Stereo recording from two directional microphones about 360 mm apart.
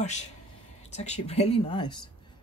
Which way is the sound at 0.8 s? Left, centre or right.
Centre.